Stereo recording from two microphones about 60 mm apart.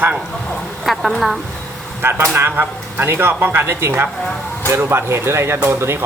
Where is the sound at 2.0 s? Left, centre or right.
Right.